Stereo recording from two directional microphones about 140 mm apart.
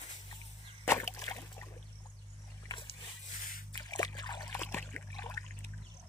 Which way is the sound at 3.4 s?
90° left.